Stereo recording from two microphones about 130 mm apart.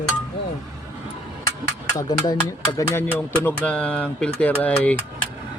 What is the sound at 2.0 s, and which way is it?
Speech, 30° left (ahead or behind).